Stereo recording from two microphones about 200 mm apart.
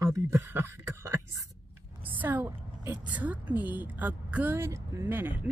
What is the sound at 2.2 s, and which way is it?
Speech, 10° right (ahead or behind).